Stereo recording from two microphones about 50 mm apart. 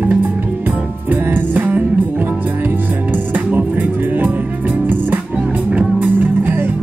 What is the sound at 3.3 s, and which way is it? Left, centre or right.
Music, right.